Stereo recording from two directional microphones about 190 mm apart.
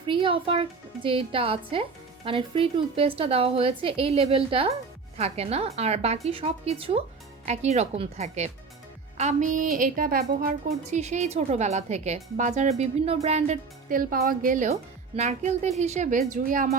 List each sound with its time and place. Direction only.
0.1 s a woman's voice: 25° right (ahead or behind); by 10.5 s 50° right (ahead or behind)
10.8 s speech: 35° right (ahead or behind)